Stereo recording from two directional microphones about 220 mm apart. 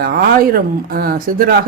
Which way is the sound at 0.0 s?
40° right (ahead or behind).